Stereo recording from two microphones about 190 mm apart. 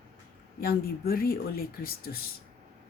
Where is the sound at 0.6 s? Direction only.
55° left (ahead or behind).